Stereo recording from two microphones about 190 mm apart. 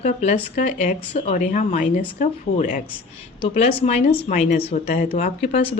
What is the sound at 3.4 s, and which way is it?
A woman's voice, 30° left (ahead or behind).